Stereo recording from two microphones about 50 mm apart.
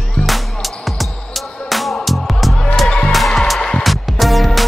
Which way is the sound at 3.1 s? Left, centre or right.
Centre.